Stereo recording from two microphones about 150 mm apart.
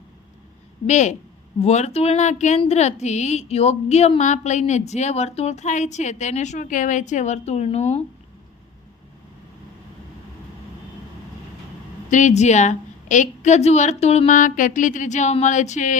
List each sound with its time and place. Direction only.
0.9 s a woman's voice: 50° left (ahead or behind)
12.1 s a woman's voice: 50° left (ahead or behind)